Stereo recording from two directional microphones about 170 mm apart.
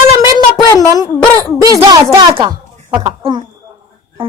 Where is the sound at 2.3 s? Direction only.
25° right (ahead or behind).